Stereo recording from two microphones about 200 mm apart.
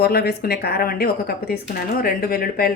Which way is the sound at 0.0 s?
50° left (ahead or behind).